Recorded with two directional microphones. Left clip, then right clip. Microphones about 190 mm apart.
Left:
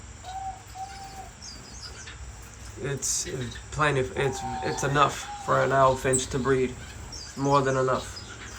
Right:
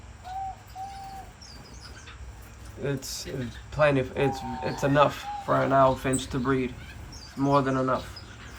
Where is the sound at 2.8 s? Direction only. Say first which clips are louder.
Left 2 dB; centre (ahead or behind).